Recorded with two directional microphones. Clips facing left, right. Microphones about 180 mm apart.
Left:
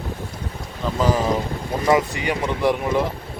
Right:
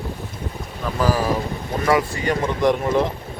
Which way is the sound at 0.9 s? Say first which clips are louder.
Even; 20° left (ahead or behind).